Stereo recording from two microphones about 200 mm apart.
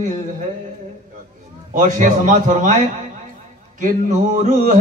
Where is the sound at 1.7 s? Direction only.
40° right (ahead or behind).